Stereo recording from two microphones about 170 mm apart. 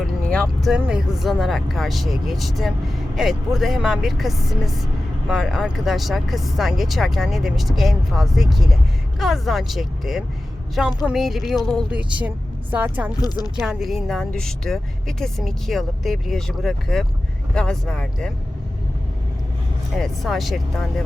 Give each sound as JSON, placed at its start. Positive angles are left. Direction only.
{"t": 0.3, "sound": "vehicle", "side_deg": 5}
{"t": 0.8, "sound": "speech", "side_deg": -5}
{"t": 13.1, "sound": "speech", "side_deg": 20}
{"t": 13.6, "sound": "speech", "side_deg": 0}
{"t": 20.0, "sound": "speech", "side_deg": 0}